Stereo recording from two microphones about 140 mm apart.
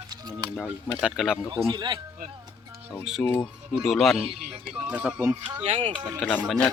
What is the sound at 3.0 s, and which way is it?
Speech, centre (ahead or behind).